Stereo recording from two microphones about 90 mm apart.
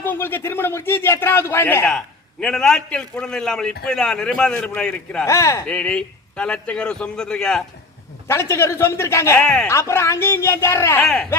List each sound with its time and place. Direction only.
0.0 s a man's voice: 25° left (ahead or behind)
1.9 s a man's voice: 5° left (ahead or behind)
5.2 s speech: 35° left (ahead or behind)
5.6 s a man's voice: 10° left (ahead or behind)
8.3 s a man's voice: 30° left (ahead or behind)
9.4 s a man's voice: 5° left (ahead or behind)
9.6 s a man's voice: 30° left (ahead or behind)
11.0 s a man's voice: 5° left (ahead or behind)